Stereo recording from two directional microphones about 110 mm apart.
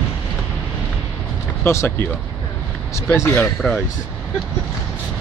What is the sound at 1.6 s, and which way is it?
Speech, 25° left (ahead or behind).